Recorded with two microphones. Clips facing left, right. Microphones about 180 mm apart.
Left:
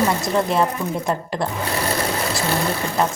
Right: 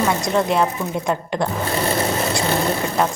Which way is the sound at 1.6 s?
25° right (ahead or behind).